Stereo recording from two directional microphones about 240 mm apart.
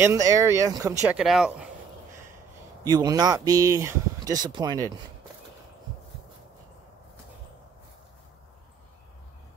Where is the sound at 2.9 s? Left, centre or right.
Centre.